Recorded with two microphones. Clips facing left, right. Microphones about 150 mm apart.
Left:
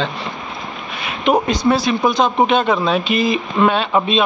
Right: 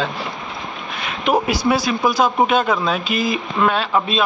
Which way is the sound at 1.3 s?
5° right (ahead or behind).